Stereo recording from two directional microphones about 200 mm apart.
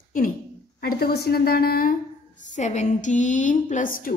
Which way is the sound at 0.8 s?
50° left (ahead or behind).